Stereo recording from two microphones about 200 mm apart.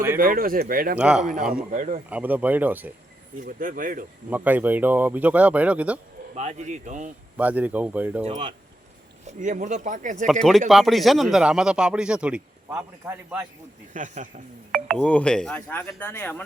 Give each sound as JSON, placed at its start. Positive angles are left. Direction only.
{"t": 0.2, "sound": "speech", "side_deg": -45}
{"t": 0.9, "sound": "speech", "side_deg": -5}
{"t": 1.2, "sound": "speech", "side_deg": -40}
{"t": 2.0, "sound": "speech", "side_deg": -5}
{"t": 3.4, "sound": "speech", "side_deg": -40}
{"t": 4.3, "sound": "speech", "side_deg": -10}
{"t": 6.3, "sound": "speech", "side_deg": -35}
{"t": 7.3, "sound": "speech", "side_deg": -10}
{"t": 8.2, "sound": "speech", "side_deg": -30}
{"t": 9.2, "sound": "speech", "side_deg": -40}
{"t": 10.7, "sound": "speech", "side_deg": 0}
{"t": 13.9, "sound": "speech", "side_deg": -40}
{"t": 14.9, "sound": "speech", "side_deg": 5}